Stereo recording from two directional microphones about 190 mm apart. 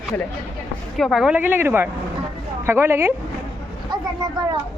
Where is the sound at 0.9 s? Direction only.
Centre (ahead or behind).